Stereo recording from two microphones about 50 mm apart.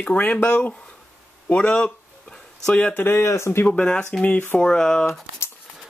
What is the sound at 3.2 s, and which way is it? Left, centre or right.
Speech, left.